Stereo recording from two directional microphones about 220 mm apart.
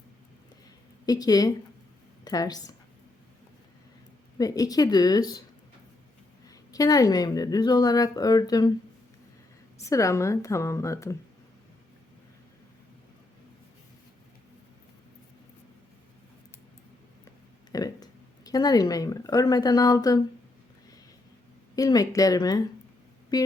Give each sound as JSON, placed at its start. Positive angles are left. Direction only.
{"t": 1.0, "sound": "a woman's voice", "side_deg": 15}
{"t": 4.4, "sound": "a woman's voice", "side_deg": 15}
{"t": 6.5, "sound": "a woman's voice", "side_deg": 15}
{"t": 9.8, "sound": "a woman's voice", "side_deg": 15}
{"t": 17.7, "sound": "speech", "side_deg": 15}
{"t": 21.8, "sound": "a woman's voice", "side_deg": 15}